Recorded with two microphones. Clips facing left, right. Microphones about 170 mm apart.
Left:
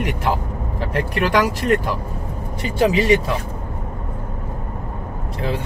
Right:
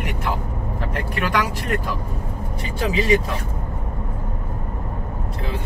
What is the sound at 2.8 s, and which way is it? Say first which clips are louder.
Speech: left 6 dB; 70° left (ahead or behind).